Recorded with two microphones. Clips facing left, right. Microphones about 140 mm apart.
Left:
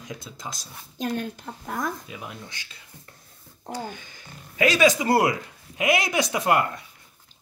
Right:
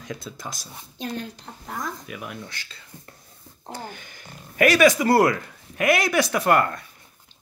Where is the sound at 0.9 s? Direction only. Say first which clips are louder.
Left 3 dB; 50° left (ahead or behind).